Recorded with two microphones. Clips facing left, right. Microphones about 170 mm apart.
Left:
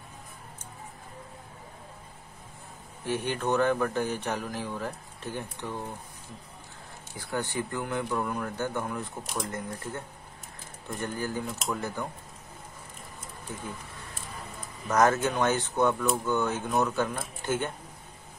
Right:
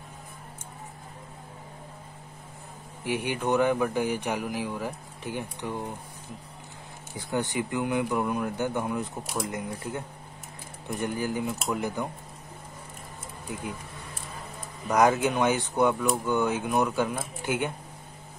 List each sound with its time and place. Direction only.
3.0 s speech: 15° right (ahead or behind)
7.2 s speech: 20° right (ahead or behind)
9.2 s speech: 5° right (ahead or behind)
9.5 s speech: 15° right (ahead or behind)
14.9 s speech: 10° right (ahead or behind)